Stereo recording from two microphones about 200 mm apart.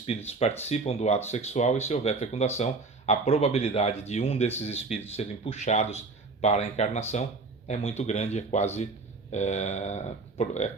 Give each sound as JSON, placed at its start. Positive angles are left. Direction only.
{"t": 0.3, "sound": "speech", "side_deg": 30}